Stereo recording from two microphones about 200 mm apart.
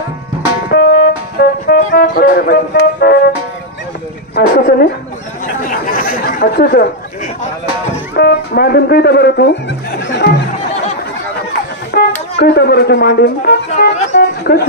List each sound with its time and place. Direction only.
0.7 s music: 55° left (ahead or behind)
4.4 s speech: 50° left (ahead or behind)
5.7 s chatter: 45° left (ahead or behind)
8.2 s speech: 50° left (ahead or behind)
11.9 s speech: 50° left (ahead or behind)
14.1 s a sound: 55° left (ahead or behind)